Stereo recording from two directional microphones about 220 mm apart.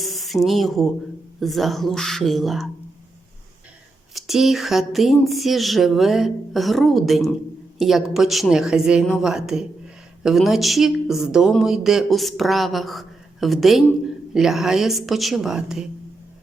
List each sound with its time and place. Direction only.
0.0 s a sound: centre (ahead or behind)
1.4 s a woman's voice: centre (ahead or behind)
4.1 s a woman's voice: centre (ahead or behind)